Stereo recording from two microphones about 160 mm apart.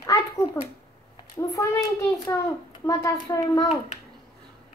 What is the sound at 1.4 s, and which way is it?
Speech, 20° left (ahead or behind).